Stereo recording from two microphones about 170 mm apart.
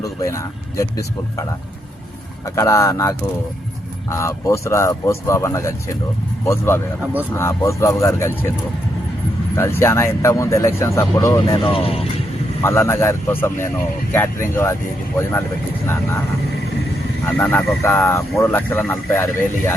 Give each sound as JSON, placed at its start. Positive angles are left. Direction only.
{"t": 0.0, "sound": "speech", "side_deg": 20}
{"t": 2.6, "sound": "speech", "side_deg": 15}
{"t": 9.6, "sound": "speech", "side_deg": 15}
{"t": 12.6, "sound": "speech", "side_deg": 15}
{"t": 15.9, "sound": "speech", "side_deg": 15}
{"t": 17.2, "sound": "speech", "side_deg": 10}